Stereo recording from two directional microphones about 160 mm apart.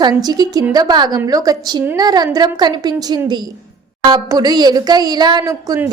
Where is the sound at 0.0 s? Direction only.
25° right (ahead or behind).